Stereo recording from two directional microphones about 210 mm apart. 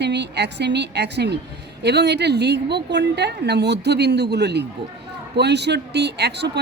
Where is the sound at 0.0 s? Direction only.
55° right (ahead or behind).